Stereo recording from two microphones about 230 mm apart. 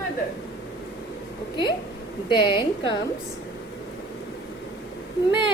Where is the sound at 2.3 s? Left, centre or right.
Centre.